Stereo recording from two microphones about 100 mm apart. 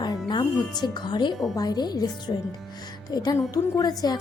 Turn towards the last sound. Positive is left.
turn(degrees=45)  # may be behind; listen again after turning